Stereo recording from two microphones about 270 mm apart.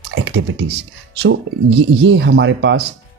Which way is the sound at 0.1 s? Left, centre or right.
Right.